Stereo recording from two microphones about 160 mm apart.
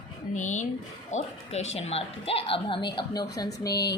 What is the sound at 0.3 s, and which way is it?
A woman's voice, 50° left (ahead or behind).